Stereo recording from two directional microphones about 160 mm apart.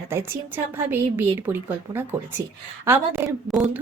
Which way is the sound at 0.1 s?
15° right (ahead or behind).